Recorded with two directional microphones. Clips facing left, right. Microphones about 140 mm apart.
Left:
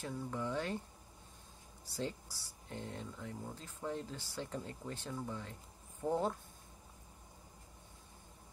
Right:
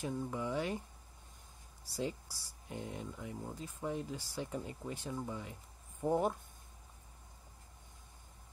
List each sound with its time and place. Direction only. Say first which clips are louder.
0.0 s speech: right 2 dB; 15° right (ahead or behind)
1.9 s speech: right 2 dB; 10° right (ahead or behind)